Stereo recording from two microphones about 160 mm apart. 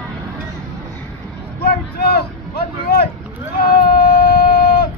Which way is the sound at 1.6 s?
75° left (ahead or behind).